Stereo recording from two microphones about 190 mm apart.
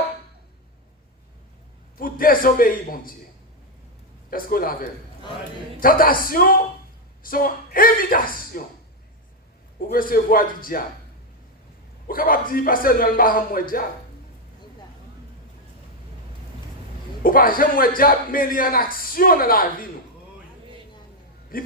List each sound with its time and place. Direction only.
2.0 s a man's voice: 50° left (ahead or behind)
4.3 s a man's voice: 50° left (ahead or behind)
9.9 s a man's voice: 50° left (ahead or behind)
12.0 s a man's voice: 50° left (ahead or behind)
17.2 s a man's voice: 50° left (ahead or behind)
21.5 s a man's voice: 50° left (ahead or behind)